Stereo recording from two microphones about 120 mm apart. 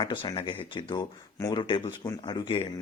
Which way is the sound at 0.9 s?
30° left (ahead or behind).